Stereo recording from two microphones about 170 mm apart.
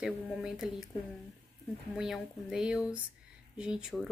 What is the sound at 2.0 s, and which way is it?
A woman's voice, centre (ahead or behind).